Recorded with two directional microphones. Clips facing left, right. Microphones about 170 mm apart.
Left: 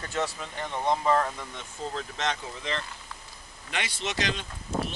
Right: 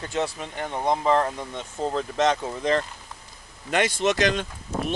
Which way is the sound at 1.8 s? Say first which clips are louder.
Right 9 dB; 40° right (ahead or behind).